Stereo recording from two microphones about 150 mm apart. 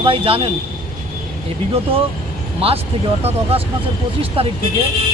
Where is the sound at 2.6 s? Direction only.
40° right (ahead or behind).